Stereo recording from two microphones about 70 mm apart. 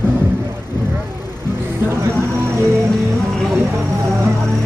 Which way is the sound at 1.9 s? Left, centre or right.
Right.